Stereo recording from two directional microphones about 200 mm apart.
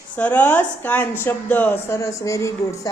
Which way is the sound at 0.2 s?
10° left (ahead or behind).